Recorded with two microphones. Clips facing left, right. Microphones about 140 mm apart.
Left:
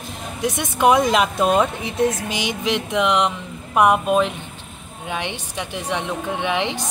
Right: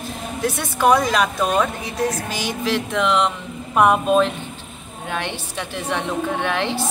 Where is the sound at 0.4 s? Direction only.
20° left (ahead or behind).